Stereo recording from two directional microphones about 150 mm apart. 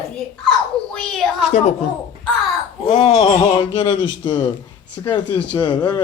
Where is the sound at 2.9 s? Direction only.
45° left (ahead or behind).